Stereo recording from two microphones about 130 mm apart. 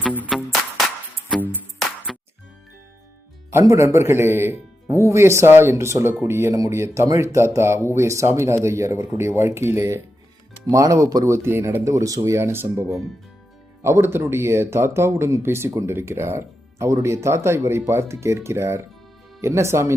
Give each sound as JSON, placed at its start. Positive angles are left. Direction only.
{"t": 0.0, "sound": "music", "side_deg": -10}
{"t": 2.1, "sound": "music", "side_deg": 0}
{"t": 3.5, "sound": "speech", "side_deg": -25}